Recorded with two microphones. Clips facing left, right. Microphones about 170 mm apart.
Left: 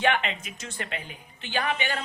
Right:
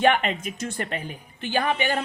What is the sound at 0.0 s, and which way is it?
Speech, 45° right (ahead or behind).